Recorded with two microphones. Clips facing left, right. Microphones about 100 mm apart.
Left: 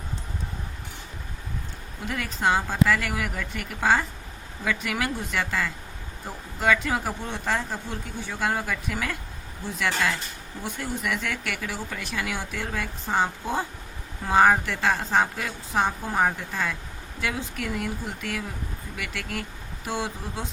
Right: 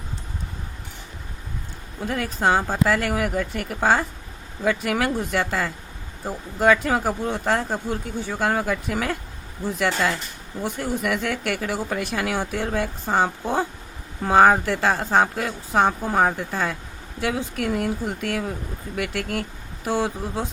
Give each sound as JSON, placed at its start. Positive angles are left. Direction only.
{"t": 2.0, "sound": "speech", "side_deg": -40}